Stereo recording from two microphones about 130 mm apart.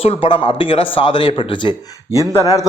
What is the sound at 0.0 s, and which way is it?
A man's voice, 45° left (ahead or behind).